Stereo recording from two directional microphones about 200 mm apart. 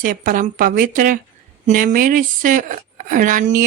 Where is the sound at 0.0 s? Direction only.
40° right (ahead or behind).